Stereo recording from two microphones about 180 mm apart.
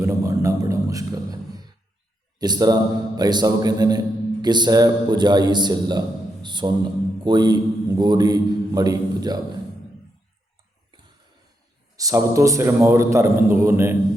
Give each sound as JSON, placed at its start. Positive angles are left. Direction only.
{"t": 0.0, "sound": "a sound", "side_deg": -15}
{"t": 2.4, "sound": "a man's voice", "side_deg": -20}
{"t": 11.9, "sound": "a man's voice", "side_deg": -20}